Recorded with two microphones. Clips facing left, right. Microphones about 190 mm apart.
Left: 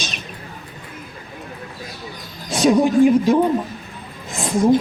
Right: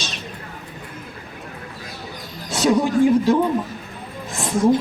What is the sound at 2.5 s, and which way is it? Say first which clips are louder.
Speech: left 3 dB; 15° left (ahead or behind).